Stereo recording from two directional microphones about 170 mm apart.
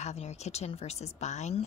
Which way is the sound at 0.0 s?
40° left (ahead or behind).